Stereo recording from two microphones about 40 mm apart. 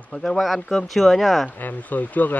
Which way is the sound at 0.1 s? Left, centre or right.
Centre.